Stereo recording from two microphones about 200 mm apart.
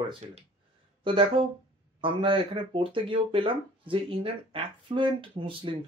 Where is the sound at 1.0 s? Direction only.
25° right (ahead or behind).